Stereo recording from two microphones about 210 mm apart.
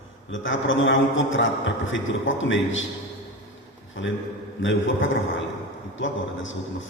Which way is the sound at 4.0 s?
65° left (ahead or behind).